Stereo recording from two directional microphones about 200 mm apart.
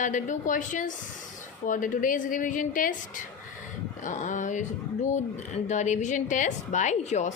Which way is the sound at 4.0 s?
40° left (ahead or behind).